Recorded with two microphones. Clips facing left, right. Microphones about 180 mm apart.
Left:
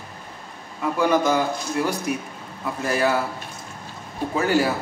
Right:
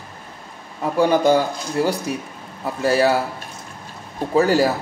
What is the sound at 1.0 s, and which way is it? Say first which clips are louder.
A man's voice: right 4 dB; 30° right (ahead or behind).